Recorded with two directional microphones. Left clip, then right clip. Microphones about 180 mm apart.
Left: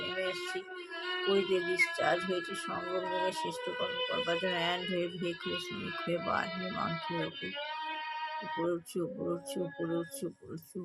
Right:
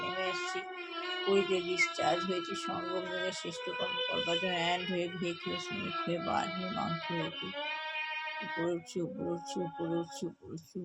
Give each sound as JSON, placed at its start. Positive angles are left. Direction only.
{"t": 0.2, "sound": "a sound", "side_deg": 15}
{"t": 1.3, "sound": "speech", "side_deg": 15}
{"t": 4.3, "sound": "speech", "side_deg": 15}
{"t": 8.5, "sound": "music", "side_deg": 20}